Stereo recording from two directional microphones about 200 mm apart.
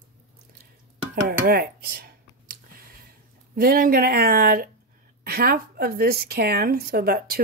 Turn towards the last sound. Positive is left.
turn(degrees=-50)  # may be behind; listen again after turning